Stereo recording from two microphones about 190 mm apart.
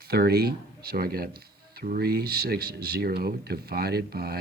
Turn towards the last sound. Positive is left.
turn(degrees=-55)  # may be behind; listen again after turning